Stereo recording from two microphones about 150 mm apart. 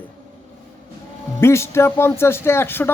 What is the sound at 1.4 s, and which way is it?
Speech, 15° left (ahead or behind).